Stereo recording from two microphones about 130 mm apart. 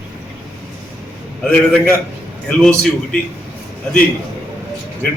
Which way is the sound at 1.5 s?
10° left (ahead or behind).